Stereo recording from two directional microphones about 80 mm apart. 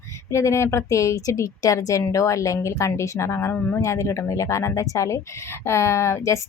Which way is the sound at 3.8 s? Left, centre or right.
Left.